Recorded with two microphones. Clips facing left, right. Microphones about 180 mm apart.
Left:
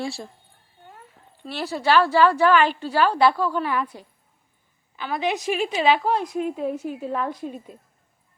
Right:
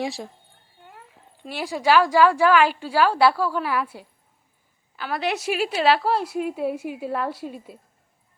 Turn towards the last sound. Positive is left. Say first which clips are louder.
# left 1 dB
turn(degrees=-5)  # may be behind; listen again after turning